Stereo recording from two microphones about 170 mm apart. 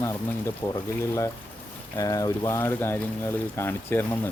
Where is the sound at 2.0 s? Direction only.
20° left (ahead or behind).